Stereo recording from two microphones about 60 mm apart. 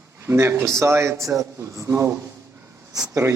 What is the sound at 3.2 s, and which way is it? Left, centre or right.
Speech, right.